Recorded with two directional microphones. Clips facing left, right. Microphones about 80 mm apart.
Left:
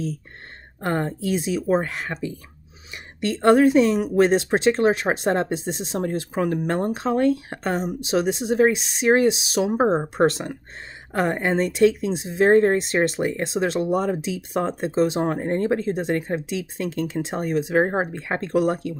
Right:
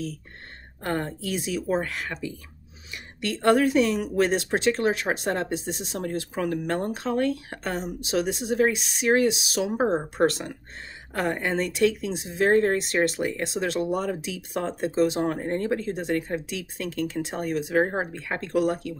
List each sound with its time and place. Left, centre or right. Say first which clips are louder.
0.8 s speech: left 5 dB; left